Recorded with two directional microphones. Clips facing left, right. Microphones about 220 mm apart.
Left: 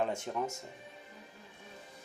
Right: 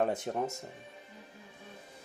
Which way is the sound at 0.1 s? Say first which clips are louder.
Right 3 dB; 40° right (ahead or behind).